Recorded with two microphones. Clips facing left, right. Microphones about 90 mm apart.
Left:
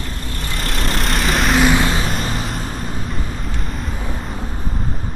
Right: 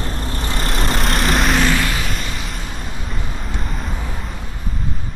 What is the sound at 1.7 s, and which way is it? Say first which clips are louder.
Vehicle: left 3 dB; 25° left (ahead or behind).